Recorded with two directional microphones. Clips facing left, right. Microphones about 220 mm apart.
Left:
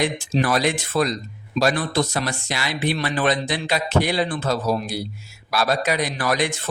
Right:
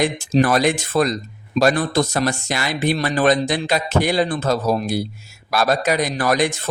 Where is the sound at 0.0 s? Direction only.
45° right (ahead or behind).